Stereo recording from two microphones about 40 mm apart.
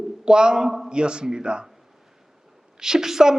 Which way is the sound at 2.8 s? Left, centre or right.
Centre.